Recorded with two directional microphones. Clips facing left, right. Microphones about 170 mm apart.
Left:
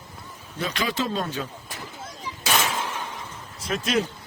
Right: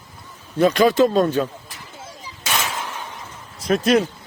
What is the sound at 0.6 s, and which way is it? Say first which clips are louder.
Speech: right 13 dB; 50° right (ahead or behind).